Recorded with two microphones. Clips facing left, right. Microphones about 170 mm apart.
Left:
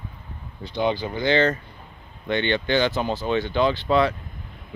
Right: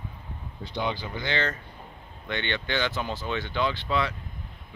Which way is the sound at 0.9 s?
35° left (ahead or behind).